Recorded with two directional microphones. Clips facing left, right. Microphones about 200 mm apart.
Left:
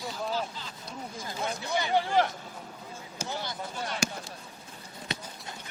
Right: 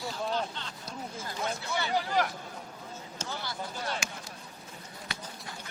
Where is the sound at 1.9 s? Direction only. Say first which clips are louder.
Left 4 dB; 25° left (ahead or behind).